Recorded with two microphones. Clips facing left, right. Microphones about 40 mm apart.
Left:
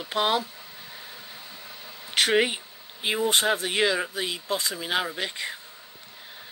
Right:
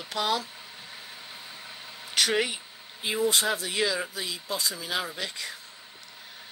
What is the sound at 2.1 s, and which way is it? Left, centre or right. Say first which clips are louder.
Speech: left 4 dB; left.